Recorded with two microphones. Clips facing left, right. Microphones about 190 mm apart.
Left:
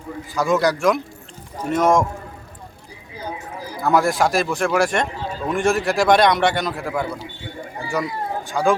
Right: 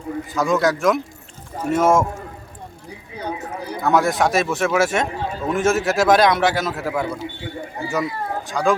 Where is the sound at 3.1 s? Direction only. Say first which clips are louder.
Right 3 dB; 65° right (ahead or behind).